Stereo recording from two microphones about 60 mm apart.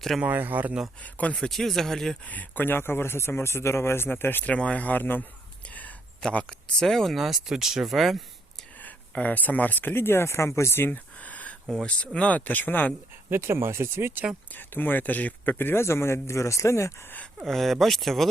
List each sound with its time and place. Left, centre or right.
0.2 s speech: right
1.0 s speech: left
1.4 s speech: centre
2.2 s speech: left
4.4 s speech: left
5.6 s a sound: left
6.2 s speech: centre
9.1 s speech: left
10.8 s a sound: left
11.9 s speech: centre
13.3 s speech: right
14.5 s speech: left
17.4 s speech: centre